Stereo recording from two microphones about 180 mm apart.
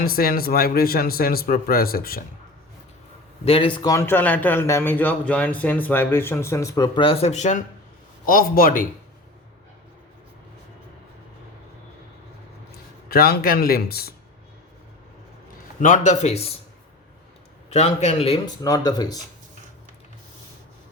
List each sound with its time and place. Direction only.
0.0 s speech: 55° left (ahead or behind)
3.4 s speech: 30° left (ahead or behind)
3.9 s a man's voice: 10° left (ahead or behind); by 7.6 s 40° left (ahead or behind)
8.3 s a man's voice: 55° left (ahead or behind)
13.1 s speech: 60° left (ahead or behind)
15.8 s a man's voice: 45° left (ahead or behind)
17.7 s a man's voice: 40° left (ahead or behind)
18.4 s speech: 20° left (ahead or behind)